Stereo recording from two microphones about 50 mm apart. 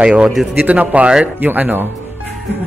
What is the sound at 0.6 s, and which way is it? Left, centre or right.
A man's voice, right.